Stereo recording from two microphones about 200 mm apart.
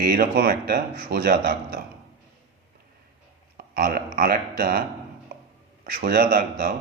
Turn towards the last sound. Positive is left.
turn(degrees=-45)  # may be behind; listen again after turning